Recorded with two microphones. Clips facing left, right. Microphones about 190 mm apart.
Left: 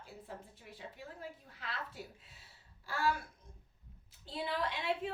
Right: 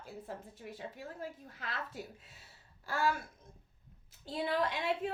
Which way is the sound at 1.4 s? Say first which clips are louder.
Right 2 dB; 45° right (ahead or behind).